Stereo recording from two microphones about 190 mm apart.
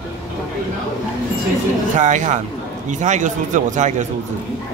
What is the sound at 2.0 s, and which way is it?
Speech, 40° right (ahead or behind).